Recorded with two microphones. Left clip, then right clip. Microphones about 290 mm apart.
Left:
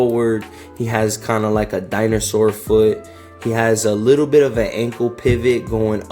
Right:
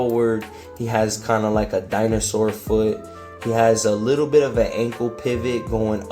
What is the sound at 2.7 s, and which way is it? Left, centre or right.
Speech, left.